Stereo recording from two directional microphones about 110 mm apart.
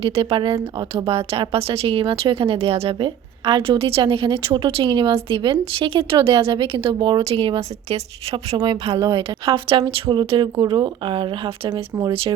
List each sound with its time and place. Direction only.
0.0 s a woman's voice: 60° right (ahead or behind)
8.5 s a woman's voice: 55° right (ahead or behind)
9.0 s speech: 50° right (ahead or behind)
11.7 s speech: 40° right (ahead or behind)